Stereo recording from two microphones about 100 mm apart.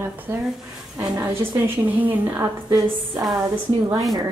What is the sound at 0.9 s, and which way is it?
A woman's voice, 30° right (ahead or behind).